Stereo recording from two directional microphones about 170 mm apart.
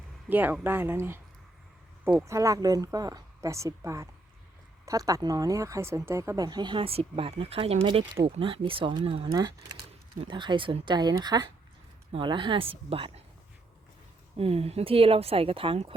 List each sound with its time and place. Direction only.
0.3 s speech: 10° right (ahead or behind); by 13.2 s 35° right (ahead or behind)
14.3 s speech: 35° right (ahead or behind)